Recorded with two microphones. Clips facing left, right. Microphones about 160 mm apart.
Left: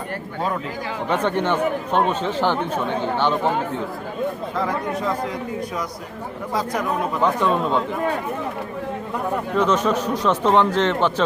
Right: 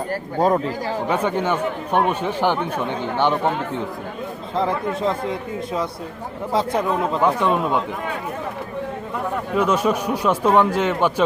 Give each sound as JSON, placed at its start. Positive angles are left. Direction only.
{"t": 0.1, "sound": "speech", "side_deg": -40}
{"t": 1.0, "sound": "speech", "side_deg": -10}
{"t": 4.5, "sound": "speech", "side_deg": -25}
{"t": 7.2, "sound": "speech", "side_deg": -10}
{"t": 9.6, "sound": "speech", "side_deg": -10}